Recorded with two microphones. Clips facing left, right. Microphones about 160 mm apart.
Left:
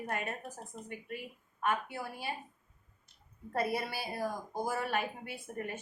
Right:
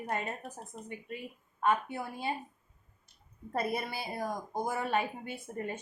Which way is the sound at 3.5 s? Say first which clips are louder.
Even; 20° right (ahead or behind).